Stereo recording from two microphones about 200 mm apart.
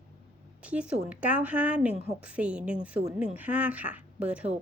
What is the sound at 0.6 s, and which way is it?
A woman's voice, 5° right (ahead or behind).